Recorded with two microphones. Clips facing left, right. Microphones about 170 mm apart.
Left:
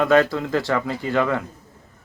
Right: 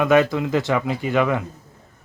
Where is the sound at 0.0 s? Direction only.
15° right (ahead or behind).